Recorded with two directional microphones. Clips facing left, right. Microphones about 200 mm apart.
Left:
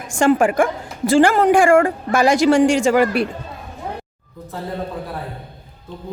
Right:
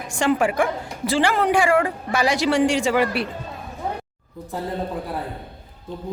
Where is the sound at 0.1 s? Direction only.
50° left (ahead or behind).